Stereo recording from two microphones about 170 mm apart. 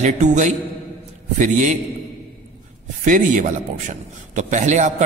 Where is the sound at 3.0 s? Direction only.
50° right (ahead or behind).